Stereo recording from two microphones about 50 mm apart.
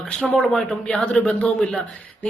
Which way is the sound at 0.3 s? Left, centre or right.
Centre.